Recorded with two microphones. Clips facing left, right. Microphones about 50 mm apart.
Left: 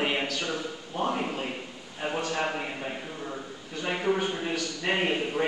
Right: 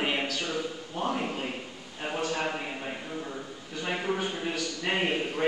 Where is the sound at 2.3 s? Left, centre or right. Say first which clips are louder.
Left 1 dB; centre.